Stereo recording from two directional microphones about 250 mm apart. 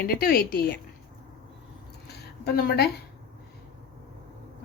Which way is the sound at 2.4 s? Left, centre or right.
Left.